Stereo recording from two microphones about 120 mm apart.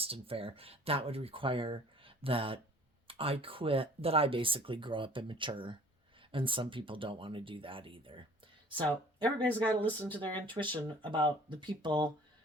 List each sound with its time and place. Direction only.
0.0 s speech: 50° right (ahead or behind)
9.2 s speech: 10° left (ahead or behind)
10.2 s speech: 45° right (ahead or behind)